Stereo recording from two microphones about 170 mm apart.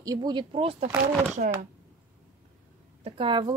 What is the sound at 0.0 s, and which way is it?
Speech, 25° right (ahead or behind).